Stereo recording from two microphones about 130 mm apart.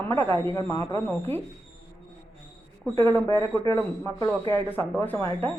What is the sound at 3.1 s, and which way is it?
Speech, 15° left (ahead or behind).